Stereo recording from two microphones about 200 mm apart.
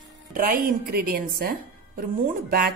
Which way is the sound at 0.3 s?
45° right (ahead or behind).